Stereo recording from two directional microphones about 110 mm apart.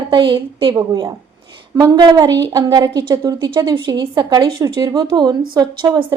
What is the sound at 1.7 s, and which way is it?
A woman's voice, 35° right (ahead or behind).